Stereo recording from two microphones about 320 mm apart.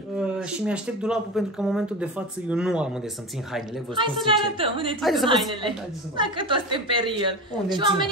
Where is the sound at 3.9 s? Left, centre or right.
Centre.